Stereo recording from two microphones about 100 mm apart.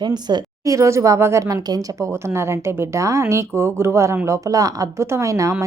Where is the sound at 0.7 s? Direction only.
30° right (ahead or behind).